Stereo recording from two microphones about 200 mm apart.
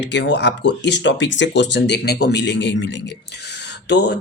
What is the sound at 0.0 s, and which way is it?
Speech, 60° left (ahead or behind).